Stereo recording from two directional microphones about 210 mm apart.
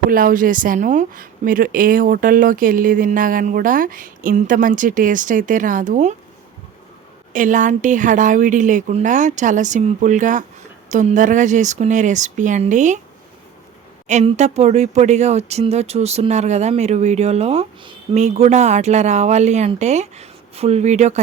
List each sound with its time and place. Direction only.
0.1 s speech: 40° right (ahead or behind)
7.3 s speech: 35° right (ahead or behind)
14.1 s speech: 35° right (ahead or behind)